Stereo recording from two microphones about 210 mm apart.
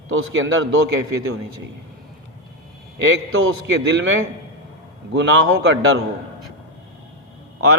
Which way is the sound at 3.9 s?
70° right (ahead or behind).